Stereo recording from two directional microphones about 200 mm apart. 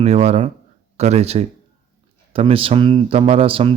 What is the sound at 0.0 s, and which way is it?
Speech, 30° right (ahead or behind).